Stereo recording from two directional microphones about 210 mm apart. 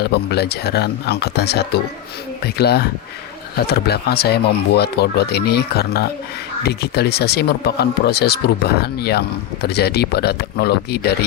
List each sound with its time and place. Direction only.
0.0 s speech: 50° left (ahead or behind)